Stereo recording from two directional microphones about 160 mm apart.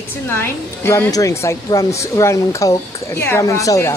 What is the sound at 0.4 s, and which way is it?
A woman's voice, 15° left (ahead or behind).